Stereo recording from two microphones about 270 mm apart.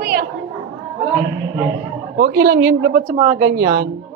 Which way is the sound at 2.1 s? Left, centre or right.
Right.